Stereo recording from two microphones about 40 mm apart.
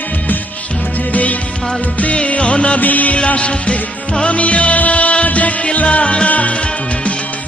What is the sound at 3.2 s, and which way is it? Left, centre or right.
Music, left.